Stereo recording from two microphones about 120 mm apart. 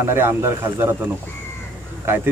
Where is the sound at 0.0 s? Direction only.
20° right (ahead or behind).